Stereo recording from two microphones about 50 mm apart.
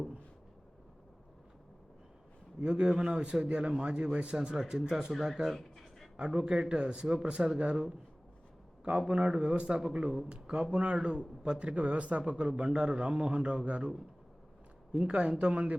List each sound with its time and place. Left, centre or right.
2.6 s a man's voice: centre
4.6 s speech: centre
5.5 s a sound: centre
6.1 s a man's voice: centre
8.8 s a man's voice: centre
14.9 s a man's voice: right